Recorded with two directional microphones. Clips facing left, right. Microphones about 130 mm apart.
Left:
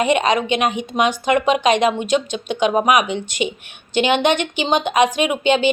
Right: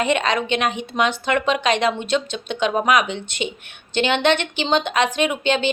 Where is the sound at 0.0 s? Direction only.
15° left (ahead or behind).